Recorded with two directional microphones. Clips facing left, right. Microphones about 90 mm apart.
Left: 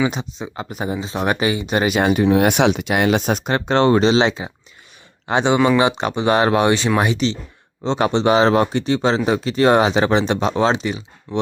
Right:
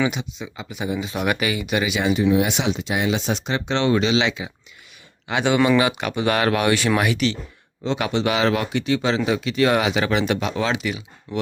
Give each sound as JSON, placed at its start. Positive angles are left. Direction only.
{"t": 0.1, "sound": "speech", "side_deg": 35}
{"t": 0.5, "sound": "speech", "side_deg": 45}
{"t": 0.9, "sound": "speech", "side_deg": 30}
{"t": 1.8, "sound": "speech", "side_deg": 50}